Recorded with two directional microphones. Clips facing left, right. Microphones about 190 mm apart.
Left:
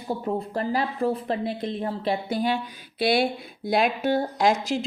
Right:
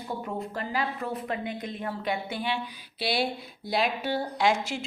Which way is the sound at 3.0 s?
55° left (ahead or behind).